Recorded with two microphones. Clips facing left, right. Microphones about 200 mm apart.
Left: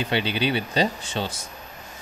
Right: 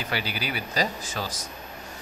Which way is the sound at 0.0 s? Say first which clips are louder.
Left 7 dB; 25° left (ahead or behind).